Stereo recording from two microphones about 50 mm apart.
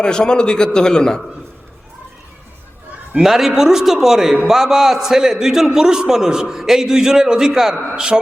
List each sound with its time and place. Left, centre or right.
0.0 s a man's voice: centre
3.2 s a man's voice: centre